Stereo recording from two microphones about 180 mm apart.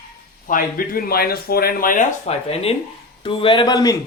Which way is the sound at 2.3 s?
35° left (ahead or behind).